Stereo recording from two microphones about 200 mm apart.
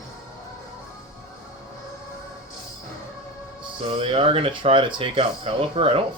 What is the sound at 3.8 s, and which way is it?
Speech, 25° right (ahead or behind).